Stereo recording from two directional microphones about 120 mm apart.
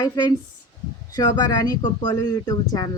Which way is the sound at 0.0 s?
35° left (ahead or behind).